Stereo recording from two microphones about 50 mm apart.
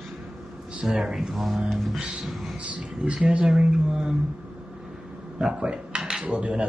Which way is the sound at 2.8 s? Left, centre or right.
Right.